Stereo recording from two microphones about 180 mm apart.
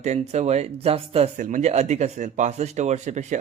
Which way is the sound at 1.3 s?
45° right (ahead or behind).